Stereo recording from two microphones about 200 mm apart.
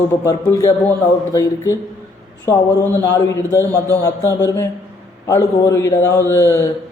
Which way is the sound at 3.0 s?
15° left (ahead or behind).